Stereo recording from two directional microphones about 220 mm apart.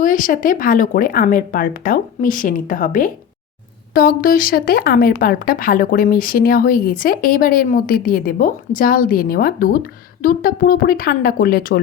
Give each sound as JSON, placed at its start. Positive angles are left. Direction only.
{"t": 0.0, "sound": "a woman's voice", "side_deg": 40}